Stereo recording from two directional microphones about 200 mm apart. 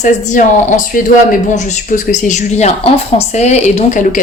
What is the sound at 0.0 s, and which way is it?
Speech, 40° left (ahead or behind).